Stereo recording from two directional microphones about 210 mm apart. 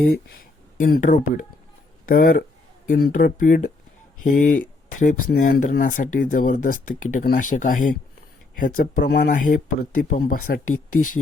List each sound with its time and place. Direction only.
0.0 s speech: 45° left (ahead or behind)